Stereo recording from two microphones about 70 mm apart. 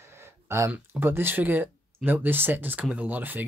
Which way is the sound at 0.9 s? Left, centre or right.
Right.